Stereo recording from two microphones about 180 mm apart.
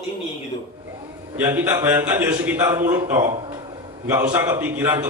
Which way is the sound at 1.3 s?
10° right (ahead or behind).